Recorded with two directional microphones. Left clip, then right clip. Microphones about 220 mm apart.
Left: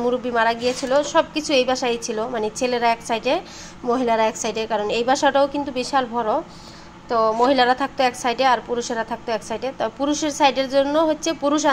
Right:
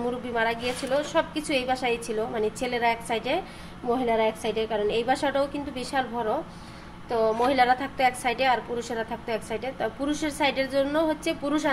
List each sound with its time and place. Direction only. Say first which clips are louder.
0.0 s a woman's voice: left 7 dB; 15° left (ahead or behind)